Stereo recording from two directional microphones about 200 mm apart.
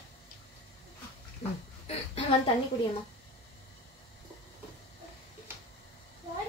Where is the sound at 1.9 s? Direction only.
30° left (ahead or behind).